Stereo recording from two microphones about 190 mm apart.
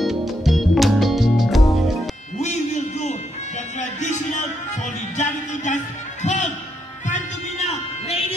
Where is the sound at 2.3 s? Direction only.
35° left (ahead or behind).